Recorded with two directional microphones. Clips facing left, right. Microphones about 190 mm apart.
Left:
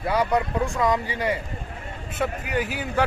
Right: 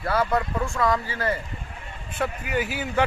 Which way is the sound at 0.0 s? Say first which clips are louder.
Left 1 dB; 15° left (ahead or behind).